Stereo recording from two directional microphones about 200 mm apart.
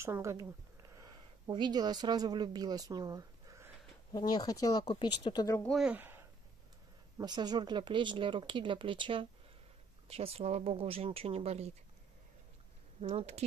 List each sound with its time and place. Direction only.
0.0 s speech: 15° right (ahead or behind)
4.3 s speech: 20° left (ahead or behind)
5.6 s speech: centre (ahead or behind)
7.2 s speech: 20° right (ahead or behind)
13.0 s speech: 35° right (ahead or behind)